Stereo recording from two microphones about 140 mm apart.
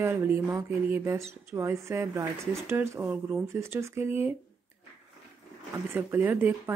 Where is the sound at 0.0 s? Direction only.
15° right (ahead or behind).